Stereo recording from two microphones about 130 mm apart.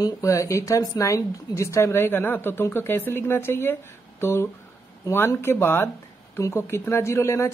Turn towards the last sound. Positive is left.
turn(degrees=20)  # may be behind; listen again after turning